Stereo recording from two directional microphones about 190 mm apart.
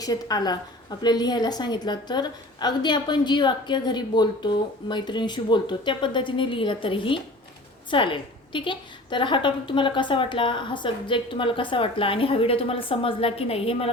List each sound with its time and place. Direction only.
0.0 s a woman's voice: 20° left (ahead or behind)